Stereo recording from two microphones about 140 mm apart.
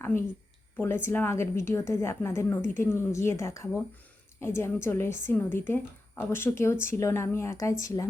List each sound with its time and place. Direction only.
1.0 s a woman's voice: 15° left (ahead or behind)